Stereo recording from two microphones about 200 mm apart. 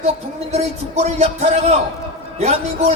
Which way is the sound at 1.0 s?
30° right (ahead or behind).